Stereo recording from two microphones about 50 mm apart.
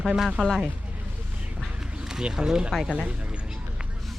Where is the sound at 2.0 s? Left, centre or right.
Centre.